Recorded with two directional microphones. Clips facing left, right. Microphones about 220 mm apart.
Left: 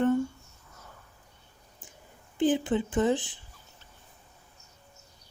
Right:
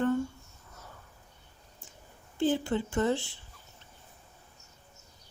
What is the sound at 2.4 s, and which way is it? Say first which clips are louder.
Speech: left 3 dB; 15° left (ahead or behind).